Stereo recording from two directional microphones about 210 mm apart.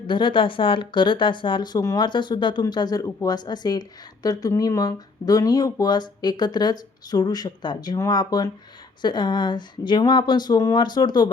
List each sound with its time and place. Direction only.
0.1 s speech: 25° left (ahead or behind)